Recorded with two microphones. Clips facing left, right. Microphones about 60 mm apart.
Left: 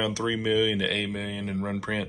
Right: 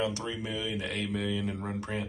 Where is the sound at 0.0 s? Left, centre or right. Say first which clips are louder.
Left 5 dB; left.